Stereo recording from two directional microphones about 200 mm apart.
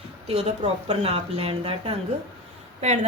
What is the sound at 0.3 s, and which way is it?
A woman's voice, 30° right (ahead or behind).